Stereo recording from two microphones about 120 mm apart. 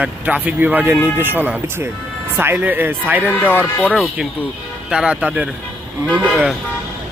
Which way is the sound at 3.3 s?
15° left (ahead or behind).